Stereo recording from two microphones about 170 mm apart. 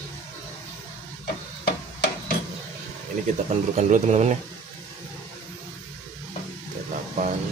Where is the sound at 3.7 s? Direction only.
40° right (ahead or behind).